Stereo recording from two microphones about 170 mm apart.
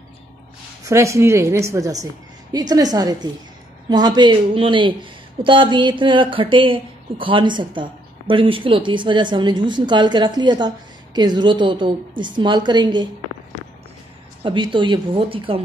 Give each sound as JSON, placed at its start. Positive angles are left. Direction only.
{"t": 0.8, "sound": "a woman's voice", "side_deg": -15}
{"t": 14.4, "sound": "speech", "side_deg": -30}